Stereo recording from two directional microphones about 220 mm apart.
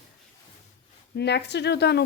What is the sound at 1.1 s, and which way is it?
Speech, 50° left (ahead or behind).